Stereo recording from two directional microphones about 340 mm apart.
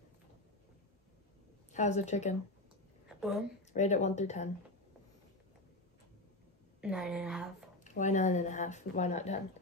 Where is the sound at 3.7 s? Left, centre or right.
Centre.